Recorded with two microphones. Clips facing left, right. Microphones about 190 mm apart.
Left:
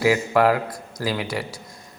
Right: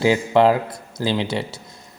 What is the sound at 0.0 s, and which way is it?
A man's voice, 25° right (ahead or behind).